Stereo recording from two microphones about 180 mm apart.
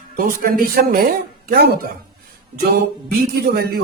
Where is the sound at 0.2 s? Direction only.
50° right (ahead or behind).